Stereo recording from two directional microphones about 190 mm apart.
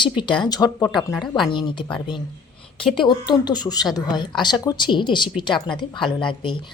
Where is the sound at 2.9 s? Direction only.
25° left (ahead or behind).